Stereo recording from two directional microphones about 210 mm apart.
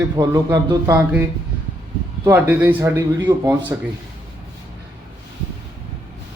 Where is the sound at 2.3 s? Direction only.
10° right (ahead or behind).